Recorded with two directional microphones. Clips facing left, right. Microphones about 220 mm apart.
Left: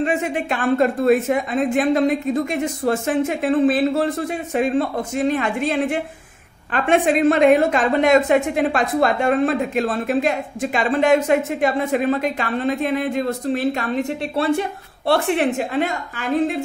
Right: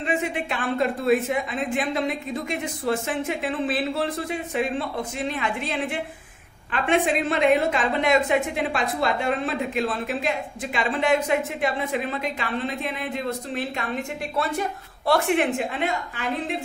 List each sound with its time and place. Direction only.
0.0 s a woman's voice: 45° left (ahead or behind)